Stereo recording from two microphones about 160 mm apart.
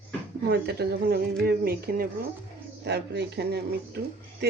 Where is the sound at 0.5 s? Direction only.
90° right; by 2.0 s 70° right (ahead or behind).